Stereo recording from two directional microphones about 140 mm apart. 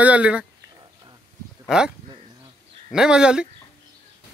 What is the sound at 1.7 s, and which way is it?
Speech, 5° right (ahead or behind).